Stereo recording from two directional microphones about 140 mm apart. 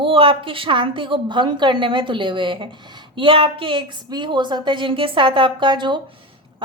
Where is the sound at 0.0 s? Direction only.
40° right (ahead or behind).